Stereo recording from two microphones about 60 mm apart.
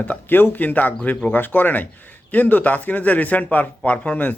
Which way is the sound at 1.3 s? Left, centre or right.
Left.